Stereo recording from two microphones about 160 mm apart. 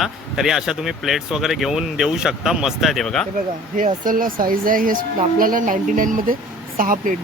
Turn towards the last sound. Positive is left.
turn(degrees=-60)  # may be behind; listen again after turning